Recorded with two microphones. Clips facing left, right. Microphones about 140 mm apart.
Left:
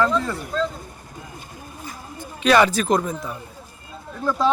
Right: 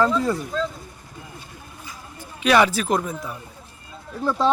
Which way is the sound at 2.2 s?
10° right (ahead or behind).